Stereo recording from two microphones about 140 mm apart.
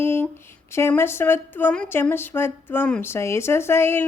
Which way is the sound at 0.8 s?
20° left (ahead or behind).